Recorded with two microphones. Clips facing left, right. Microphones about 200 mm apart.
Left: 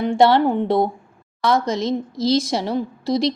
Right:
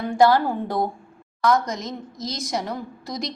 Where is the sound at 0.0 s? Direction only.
25° left (ahead or behind).